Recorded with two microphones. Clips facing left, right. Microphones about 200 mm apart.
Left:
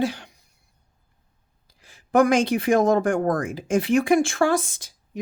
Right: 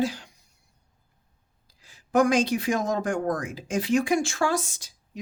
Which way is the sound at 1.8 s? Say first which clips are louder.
Left 3 dB; 55° left (ahead or behind).